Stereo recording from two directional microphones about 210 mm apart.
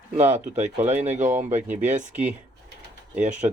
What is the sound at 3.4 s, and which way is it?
Speech, 25° right (ahead or behind).